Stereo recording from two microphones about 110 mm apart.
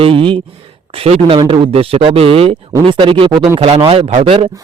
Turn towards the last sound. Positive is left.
turn(degrees=-60)  # may be behind; listen again after turning